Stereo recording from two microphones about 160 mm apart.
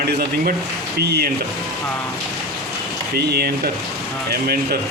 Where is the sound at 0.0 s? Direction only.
70° right (ahead or behind).